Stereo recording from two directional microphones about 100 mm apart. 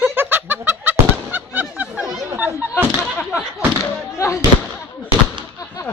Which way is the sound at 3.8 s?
30° left (ahead or behind).